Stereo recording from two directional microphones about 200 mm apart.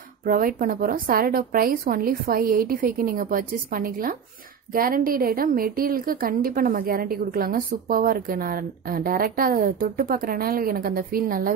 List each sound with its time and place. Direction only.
0.2 s a woman's voice: 45° right (ahead or behind)